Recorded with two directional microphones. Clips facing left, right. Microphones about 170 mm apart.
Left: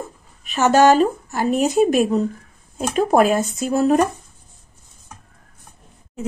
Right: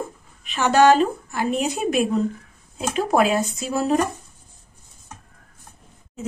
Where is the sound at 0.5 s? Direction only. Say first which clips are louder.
Left 2 dB; 40° left (ahead or behind).